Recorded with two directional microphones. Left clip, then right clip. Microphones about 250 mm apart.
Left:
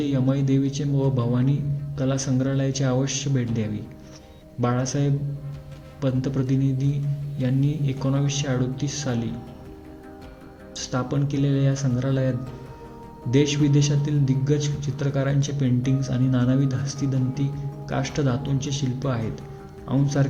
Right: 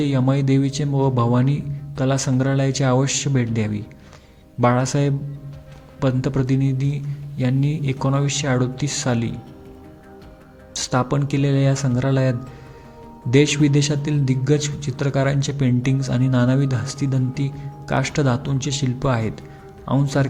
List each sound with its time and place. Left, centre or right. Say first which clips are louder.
0.0 s speech: right 4 dB; centre
6.0 s speech: right 4 dB; centre
10.8 s a man's voice: right 6 dB; centre